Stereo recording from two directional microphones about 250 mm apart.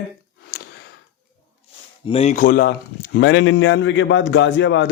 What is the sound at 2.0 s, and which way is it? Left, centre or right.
A man's voice, left.